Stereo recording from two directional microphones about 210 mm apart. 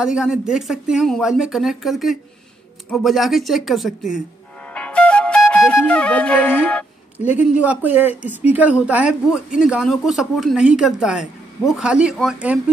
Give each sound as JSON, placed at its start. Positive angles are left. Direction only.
{"t": 0.0, "sound": "speech", "side_deg": -5}
{"t": 4.7, "sound": "music", "side_deg": 5}
{"t": 7.2, "sound": "speech", "side_deg": 35}
{"t": 7.6, "sound": "speech", "side_deg": -5}